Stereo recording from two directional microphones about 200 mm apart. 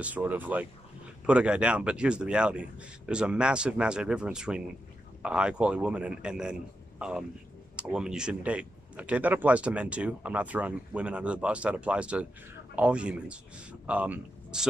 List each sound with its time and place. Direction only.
0.0 s speech: 10° right (ahead or behind)